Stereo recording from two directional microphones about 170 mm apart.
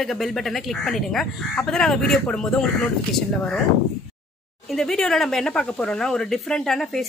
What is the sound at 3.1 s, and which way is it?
Speech, 5° left (ahead or behind).